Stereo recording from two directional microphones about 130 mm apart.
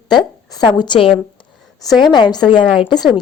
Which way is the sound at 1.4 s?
30° left (ahead or behind).